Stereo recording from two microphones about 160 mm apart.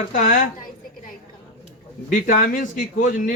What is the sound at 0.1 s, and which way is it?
Speech, 55° left (ahead or behind).